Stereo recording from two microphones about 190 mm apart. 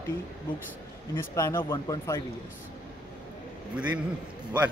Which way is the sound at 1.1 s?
15° left (ahead or behind).